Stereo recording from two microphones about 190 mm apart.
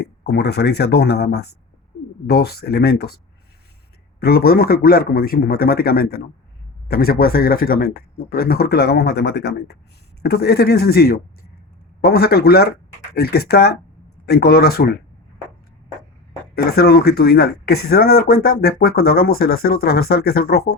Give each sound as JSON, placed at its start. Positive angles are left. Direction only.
{"t": 0.0, "sound": "speech", "side_deg": 60}
{"t": 4.2, "sound": "speech", "side_deg": 55}
{"t": 16.6, "sound": "speech", "side_deg": 55}